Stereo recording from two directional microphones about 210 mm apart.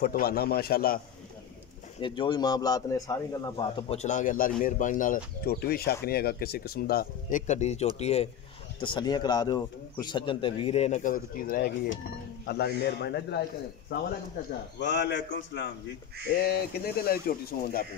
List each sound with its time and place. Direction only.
0.0 s speech: 45° left (ahead or behind)
2.0 s a man's voice: 25° left (ahead or behind); by 13.4 s 55° left (ahead or behind)
14.8 s a man's voice: 55° left (ahead or behind)